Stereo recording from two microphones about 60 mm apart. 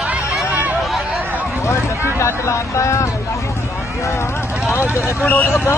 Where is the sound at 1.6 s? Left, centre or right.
Left.